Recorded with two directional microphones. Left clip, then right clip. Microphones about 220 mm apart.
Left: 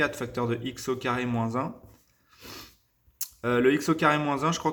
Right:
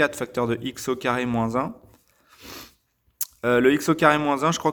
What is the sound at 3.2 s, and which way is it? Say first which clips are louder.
Speech: right 5 dB; 45° right (ahead or behind).